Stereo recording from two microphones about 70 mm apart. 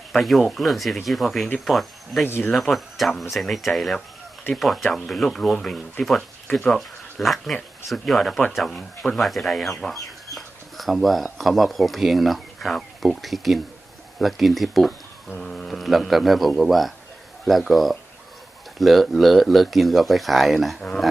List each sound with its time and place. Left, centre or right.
0.1 s speech: centre
2.2 s speech: left
2.5 s speech: centre